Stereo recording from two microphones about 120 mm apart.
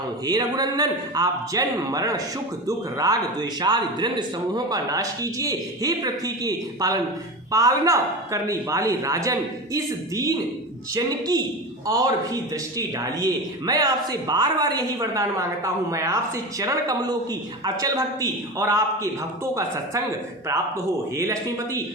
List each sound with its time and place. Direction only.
0.3 s a man's voice: 35° right (ahead or behind)
21.2 s speech: 25° right (ahead or behind)